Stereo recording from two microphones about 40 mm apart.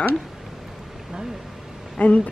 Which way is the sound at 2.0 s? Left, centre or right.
Left.